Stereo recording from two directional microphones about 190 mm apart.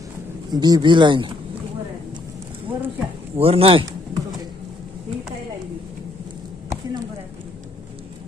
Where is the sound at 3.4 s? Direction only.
30° right (ahead or behind).